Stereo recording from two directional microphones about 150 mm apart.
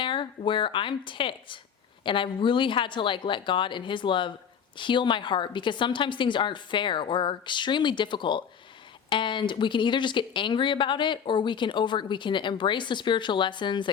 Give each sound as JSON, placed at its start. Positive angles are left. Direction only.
{"t": 0.0, "sound": "speech", "side_deg": 35}